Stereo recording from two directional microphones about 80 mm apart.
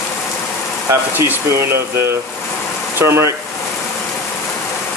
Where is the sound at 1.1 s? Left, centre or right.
Right.